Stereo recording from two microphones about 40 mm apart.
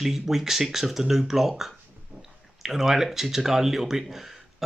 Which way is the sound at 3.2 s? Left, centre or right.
Centre.